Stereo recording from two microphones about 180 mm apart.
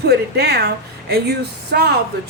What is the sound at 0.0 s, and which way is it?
Speech, 65° right (ahead or behind).